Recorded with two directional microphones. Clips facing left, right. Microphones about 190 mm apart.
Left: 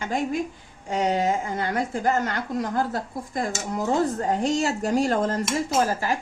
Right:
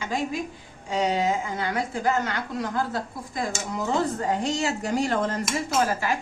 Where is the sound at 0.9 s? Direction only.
50° left (ahead or behind).